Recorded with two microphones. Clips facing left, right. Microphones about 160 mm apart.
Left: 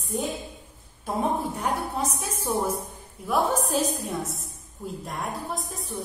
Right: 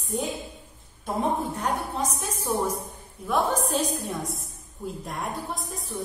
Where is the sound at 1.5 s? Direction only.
10° left (ahead or behind).